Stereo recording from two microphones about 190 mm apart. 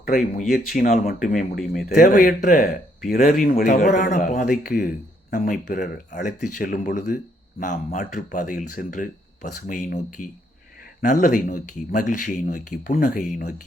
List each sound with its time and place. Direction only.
0.3 s speech: 45° left (ahead or behind)